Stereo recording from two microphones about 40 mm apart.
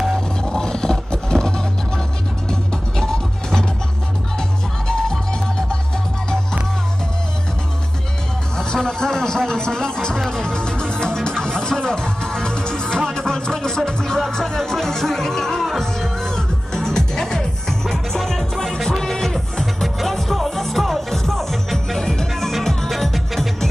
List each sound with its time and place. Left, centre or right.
0.4 s vehicle: centre
2.7 s music: centre
8.8 s music: centre